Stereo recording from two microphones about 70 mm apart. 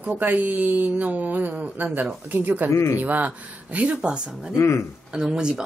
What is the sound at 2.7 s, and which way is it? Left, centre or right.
Speech, left.